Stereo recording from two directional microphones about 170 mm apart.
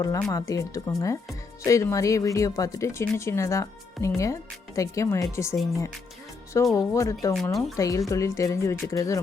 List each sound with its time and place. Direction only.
0.0 s speech: 20° left (ahead or behind)
6.7 s speech: 20° left (ahead or behind)